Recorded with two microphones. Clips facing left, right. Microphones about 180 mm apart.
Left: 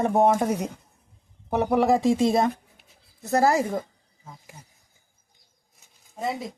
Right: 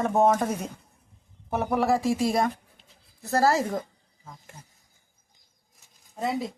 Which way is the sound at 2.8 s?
20° left (ahead or behind).